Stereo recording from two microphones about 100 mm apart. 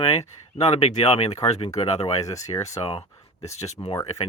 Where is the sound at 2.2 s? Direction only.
35° left (ahead or behind).